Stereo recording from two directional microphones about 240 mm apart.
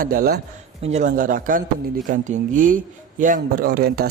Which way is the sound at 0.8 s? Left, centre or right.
Right.